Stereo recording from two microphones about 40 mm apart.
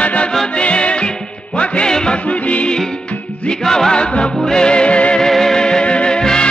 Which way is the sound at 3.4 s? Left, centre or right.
Centre.